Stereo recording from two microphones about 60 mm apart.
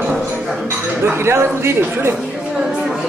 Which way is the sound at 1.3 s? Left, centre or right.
Right.